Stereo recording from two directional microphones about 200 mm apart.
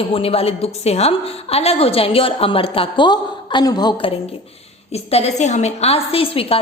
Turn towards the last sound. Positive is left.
turn(degrees=30)  # may be behind; listen again after turning